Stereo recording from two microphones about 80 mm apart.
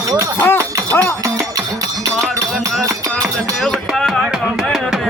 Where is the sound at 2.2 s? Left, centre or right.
Right.